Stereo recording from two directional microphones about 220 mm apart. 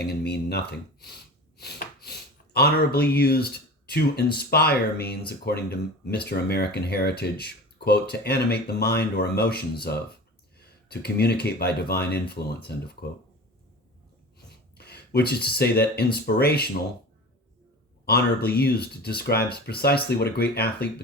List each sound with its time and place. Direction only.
0.0 s speech: 45° left (ahead or behind)
14.3 s a sound: 45° left (ahead or behind)
16.1 s speech: 45° left (ahead or behind)
18.0 s speech: 45° left (ahead or behind)